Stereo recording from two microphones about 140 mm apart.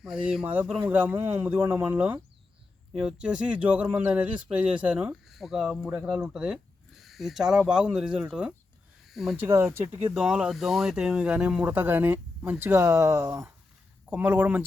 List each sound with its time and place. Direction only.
0.0 s speech: 5° right (ahead or behind)
9.4 s speech: 15° right (ahead or behind)
10.2 s speech: 5° right (ahead or behind)